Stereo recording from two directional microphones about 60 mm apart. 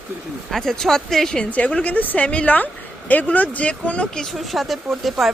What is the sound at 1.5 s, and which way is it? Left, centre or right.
Speech, left.